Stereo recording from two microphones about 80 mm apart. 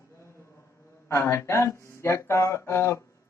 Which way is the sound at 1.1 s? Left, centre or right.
Left.